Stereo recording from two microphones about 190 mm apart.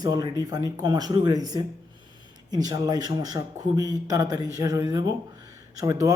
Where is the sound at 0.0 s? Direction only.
20° right (ahead or behind).